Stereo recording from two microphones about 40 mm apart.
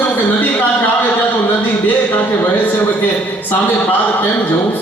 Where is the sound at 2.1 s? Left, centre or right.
Left.